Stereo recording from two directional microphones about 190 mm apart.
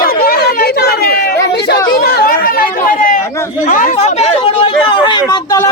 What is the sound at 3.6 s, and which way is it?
A man's voice, 40° left (ahead or behind).